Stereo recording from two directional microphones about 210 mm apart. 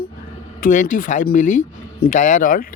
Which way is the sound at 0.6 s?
40° left (ahead or behind).